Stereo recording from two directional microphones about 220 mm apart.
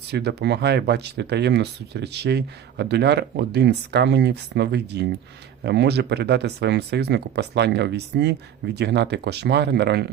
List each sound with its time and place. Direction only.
0.1 s speech: 50° right (ahead or behind)